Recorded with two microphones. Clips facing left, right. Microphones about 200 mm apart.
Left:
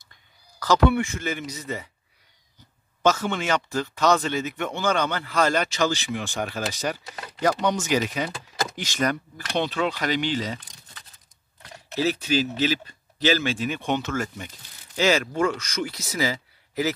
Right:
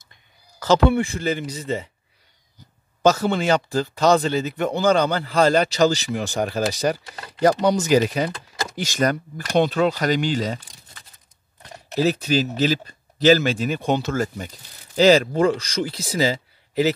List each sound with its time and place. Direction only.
0.6 s speech: 30° right (ahead or behind)
3.0 s speech: 35° right (ahead or behind)
8.3 s a sound: centre (ahead or behind)
8.7 s speech: 40° right (ahead or behind)
11.9 s speech: 40° right (ahead or behind)